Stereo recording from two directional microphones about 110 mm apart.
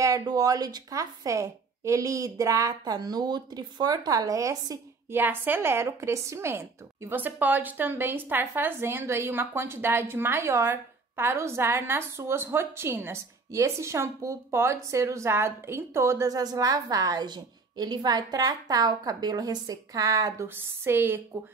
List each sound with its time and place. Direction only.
0.0 s a woman's voice: 30° right (ahead or behind)
5.2 s a woman's voice: 20° right (ahead or behind); by 20.4 s 35° right (ahead or behind)
20.4 s a woman's voice: 20° right (ahead or behind)